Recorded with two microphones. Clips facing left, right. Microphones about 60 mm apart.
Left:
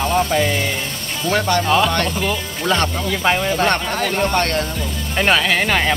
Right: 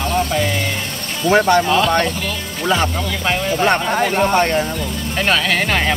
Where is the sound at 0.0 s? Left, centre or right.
Centre.